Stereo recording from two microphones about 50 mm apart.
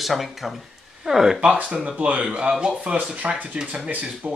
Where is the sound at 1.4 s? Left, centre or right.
Right.